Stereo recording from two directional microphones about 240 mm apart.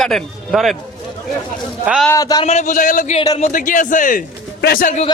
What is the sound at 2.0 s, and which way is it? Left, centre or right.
Speech, centre.